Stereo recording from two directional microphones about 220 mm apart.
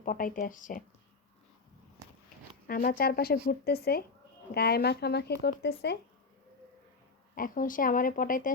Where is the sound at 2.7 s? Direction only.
40° left (ahead or behind).